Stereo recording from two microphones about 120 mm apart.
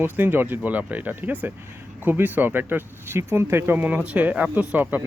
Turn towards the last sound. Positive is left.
turn(degrees=-15)  # may be behind; listen again after turning